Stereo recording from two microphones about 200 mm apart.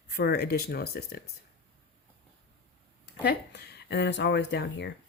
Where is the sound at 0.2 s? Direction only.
55° left (ahead or behind).